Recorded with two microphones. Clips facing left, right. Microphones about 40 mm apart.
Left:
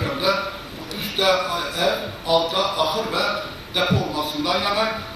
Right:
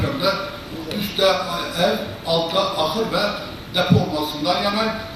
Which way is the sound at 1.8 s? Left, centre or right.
Right.